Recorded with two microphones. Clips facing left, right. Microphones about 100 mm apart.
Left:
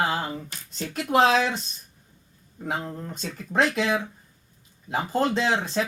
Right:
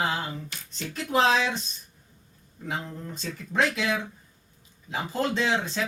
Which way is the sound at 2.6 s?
40° left (ahead or behind).